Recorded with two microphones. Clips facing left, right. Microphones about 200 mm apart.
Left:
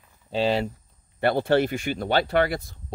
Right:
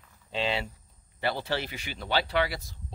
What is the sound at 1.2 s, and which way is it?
Speech, 55° left (ahead or behind).